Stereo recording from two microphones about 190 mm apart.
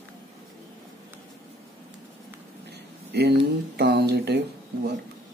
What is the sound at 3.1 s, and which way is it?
Speech, 60° right (ahead or behind).